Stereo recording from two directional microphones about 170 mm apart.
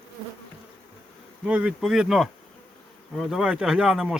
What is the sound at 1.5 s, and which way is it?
Speech, 5° right (ahead or behind).